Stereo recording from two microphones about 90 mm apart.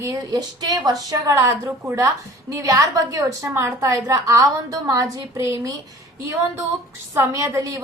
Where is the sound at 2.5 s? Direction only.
35° right (ahead or behind).